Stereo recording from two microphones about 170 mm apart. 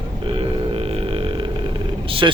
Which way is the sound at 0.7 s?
35° right (ahead or behind).